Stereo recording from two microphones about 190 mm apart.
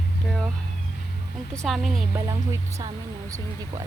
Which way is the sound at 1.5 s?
Centre (ahead or behind).